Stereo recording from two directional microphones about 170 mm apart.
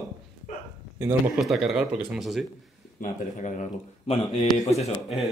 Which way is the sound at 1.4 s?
Centre (ahead or behind).